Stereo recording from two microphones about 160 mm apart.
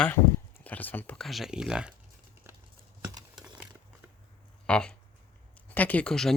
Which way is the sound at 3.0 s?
25° right (ahead or behind).